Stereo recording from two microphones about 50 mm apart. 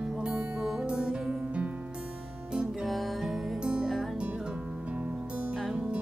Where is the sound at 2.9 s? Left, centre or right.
Centre.